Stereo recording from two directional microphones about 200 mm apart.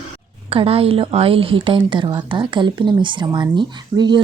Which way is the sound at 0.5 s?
30° right (ahead or behind).